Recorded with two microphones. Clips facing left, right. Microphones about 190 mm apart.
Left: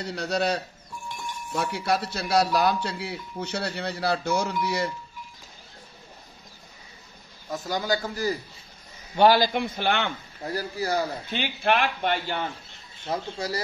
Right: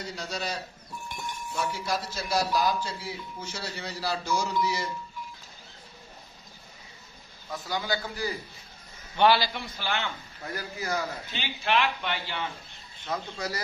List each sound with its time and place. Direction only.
0.0 s a man's voice: 65° left (ahead or behind)
7.5 s a man's voice: 45° left (ahead or behind); by 10.1 s 60° left (ahead or behind)
10.4 s a man's voice: 35° left (ahead or behind)
11.3 s speech: 55° left (ahead or behind)
13.0 s speech: 30° left (ahead or behind)